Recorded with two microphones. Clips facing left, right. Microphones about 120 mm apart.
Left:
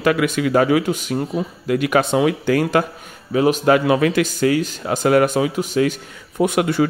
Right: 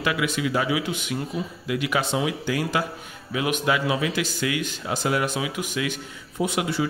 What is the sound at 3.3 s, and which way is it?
Speech, 40° left (ahead or behind).